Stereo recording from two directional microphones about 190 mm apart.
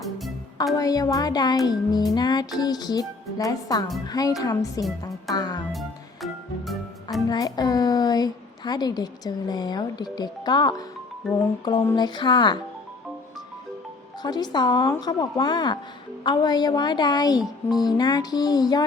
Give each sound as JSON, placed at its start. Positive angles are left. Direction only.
{"t": 0.0, "sound": "music", "side_deg": 0}
{"t": 0.8, "sound": "a woman's voice", "side_deg": 20}
{"t": 6.2, "sound": "music", "side_deg": 0}
{"t": 7.3, "sound": "a woman's voice", "side_deg": 20}
{"t": 14.2, "sound": "a woman's voice", "side_deg": 20}